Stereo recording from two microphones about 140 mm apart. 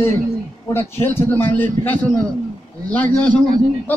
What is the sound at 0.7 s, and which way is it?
Speech, 15° left (ahead or behind).